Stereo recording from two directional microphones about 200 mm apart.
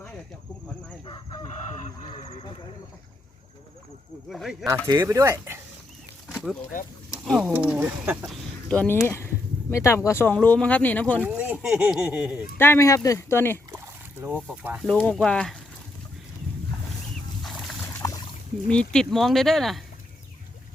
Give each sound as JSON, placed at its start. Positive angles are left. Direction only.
{"t": 1.0, "sound": "chicken", "side_deg": 25}
{"t": 2.0, "sound": "a sound", "side_deg": 30}
{"t": 4.3, "sound": "speech", "side_deg": 0}
{"t": 4.9, "sound": "speech", "side_deg": -15}
{"t": 6.3, "sound": "speech", "side_deg": 0}
{"t": 8.7, "sound": "speech", "side_deg": 5}
{"t": 11.2, "sound": "speech", "side_deg": -10}
{"t": 12.5, "sound": "speech", "side_deg": 10}
{"t": 13.7, "sound": "rowboat", "side_deg": -10}
{"t": 14.4, "sound": "speech", "side_deg": -10}
{"t": 14.8, "sound": "speech", "side_deg": 5}
{"t": 17.4, "sound": "boat", "side_deg": 0}
{"t": 18.0, "sound": "a sound", "side_deg": 20}
{"t": 18.7, "sound": "speech", "side_deg": 5}